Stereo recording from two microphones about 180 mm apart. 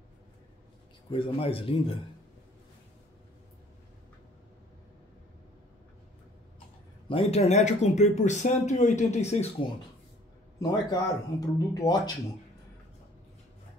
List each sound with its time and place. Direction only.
1.1 s speech: 30° left (ahead or behind)
7.1 s speech: 35° left (ahead or behind)
10.6 s speech: 20° left (ahead or behind)